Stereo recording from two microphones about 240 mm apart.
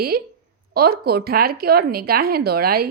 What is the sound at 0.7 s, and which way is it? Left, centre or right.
Speech, right.